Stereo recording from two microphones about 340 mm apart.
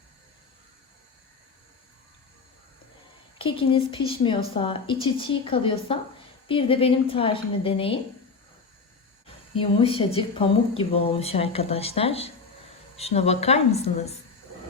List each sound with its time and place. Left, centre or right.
3.3 s speech: centre
9.6 s speech: centre